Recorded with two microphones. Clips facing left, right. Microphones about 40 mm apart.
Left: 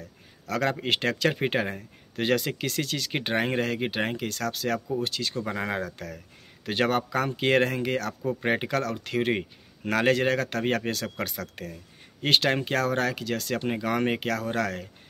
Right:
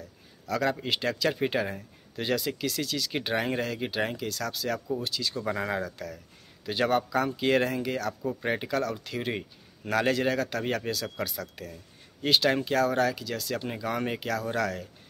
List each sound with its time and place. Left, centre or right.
0.5 s speech: left
5.6 s speech: left
5.9 s speech: left